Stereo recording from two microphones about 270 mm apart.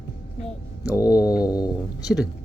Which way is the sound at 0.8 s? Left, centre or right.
Centre.